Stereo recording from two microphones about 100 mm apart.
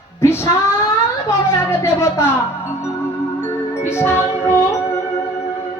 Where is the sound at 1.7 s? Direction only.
25° left (ahead or behind).